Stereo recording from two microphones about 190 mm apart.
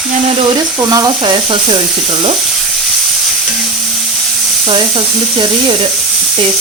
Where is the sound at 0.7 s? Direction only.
20° right (ahead or behind).